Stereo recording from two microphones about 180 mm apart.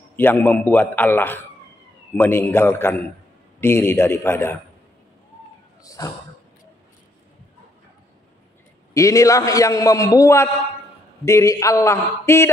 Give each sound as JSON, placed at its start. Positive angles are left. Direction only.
{"t": 0.1, "sound": "a man's voice", "side_deg": 10}
{"t": 5.9, "sound": "speech", "side_deg": 20}
{"t": 8.9, "sound": "a man's voice", "side_deg": 15}